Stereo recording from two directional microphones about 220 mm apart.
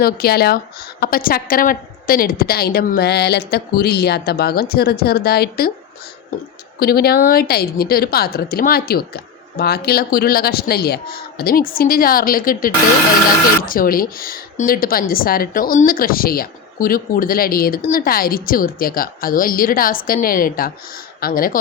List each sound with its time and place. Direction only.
0.0 s speech: 45° left (ahead or behind)
6.7 s speech: 45° left (ahead or behind)